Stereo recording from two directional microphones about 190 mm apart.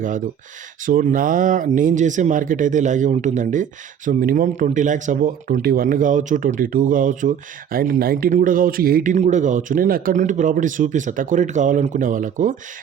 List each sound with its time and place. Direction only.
0.9 s speech: 45° right (ahead or behind)
9.1 s speech: 40° right (ahead or behind)